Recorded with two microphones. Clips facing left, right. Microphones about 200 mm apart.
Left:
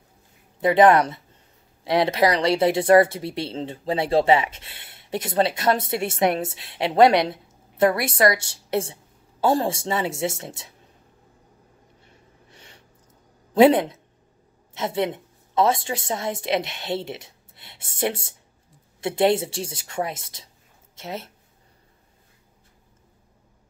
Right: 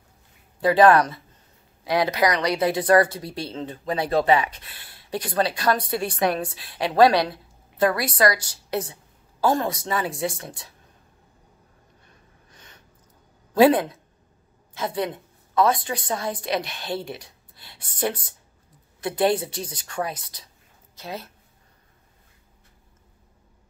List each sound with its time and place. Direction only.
0.6 s speech: 20° left (ahead or behind)
12.0 s gasp: 25° left (ahead or behind)
13.6 s a woman's voice: 25° left (ahead or behind)